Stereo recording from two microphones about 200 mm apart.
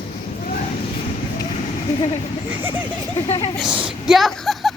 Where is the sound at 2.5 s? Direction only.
10° right (ahead or behind).